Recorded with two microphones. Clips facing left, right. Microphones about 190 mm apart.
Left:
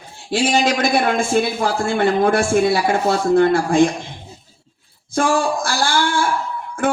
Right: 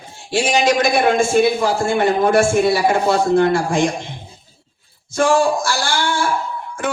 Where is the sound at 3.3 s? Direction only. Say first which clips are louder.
Left 1 dB; 55° left (ahead or behind).